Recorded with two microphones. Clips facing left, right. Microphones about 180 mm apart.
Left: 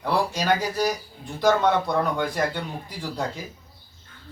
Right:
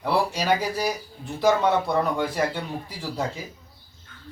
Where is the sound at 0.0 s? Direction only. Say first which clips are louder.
Even; 5° right (ahead or behind).